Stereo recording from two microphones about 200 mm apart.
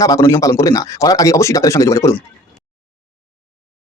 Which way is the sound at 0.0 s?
15° left (ahead or behind).